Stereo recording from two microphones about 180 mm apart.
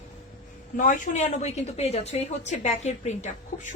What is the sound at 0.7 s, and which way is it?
A woman's voice, 45° left (ahead or behind).